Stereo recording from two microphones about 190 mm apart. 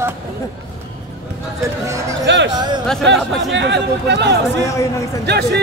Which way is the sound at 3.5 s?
65° right (ahead or behind).